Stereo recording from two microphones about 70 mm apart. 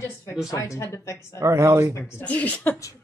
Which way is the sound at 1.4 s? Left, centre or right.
Right.